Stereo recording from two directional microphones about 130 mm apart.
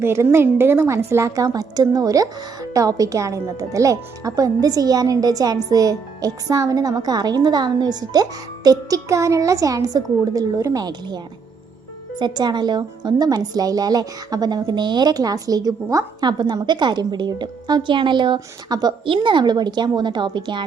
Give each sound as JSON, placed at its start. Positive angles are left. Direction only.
{"t": 0.0, "sound": "a woman's voice", "side_deg": -20}
{"t": 12.2, "sound": "a woman's voice", "side_deg": -35}